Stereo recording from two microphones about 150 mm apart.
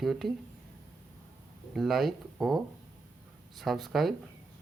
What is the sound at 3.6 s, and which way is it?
Speech, centre (ahead or behind).